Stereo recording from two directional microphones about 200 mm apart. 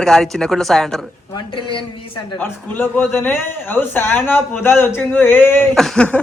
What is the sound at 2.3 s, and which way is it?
A man's voice, 10° left (ahead or behind).